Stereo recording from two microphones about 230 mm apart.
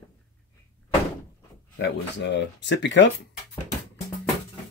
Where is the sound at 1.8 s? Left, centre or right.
Left.